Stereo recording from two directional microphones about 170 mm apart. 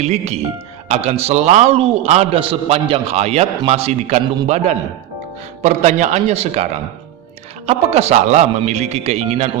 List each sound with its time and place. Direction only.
0.0 s a man's voice: 40° right (ahead or behind)
5.6 s a man's voice: 45° right (ahead or behind)